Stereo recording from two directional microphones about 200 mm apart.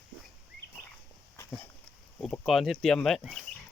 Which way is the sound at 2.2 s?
5° left (ahead or behind).